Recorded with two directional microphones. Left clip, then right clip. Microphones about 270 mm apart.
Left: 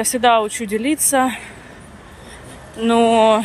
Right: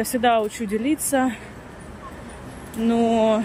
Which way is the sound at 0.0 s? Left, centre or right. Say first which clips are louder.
Left 5 dB; centre.